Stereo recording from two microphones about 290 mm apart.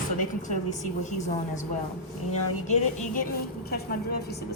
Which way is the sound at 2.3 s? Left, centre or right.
Left.